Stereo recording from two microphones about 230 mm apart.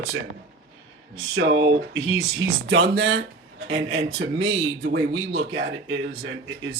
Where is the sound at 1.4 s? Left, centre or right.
Right.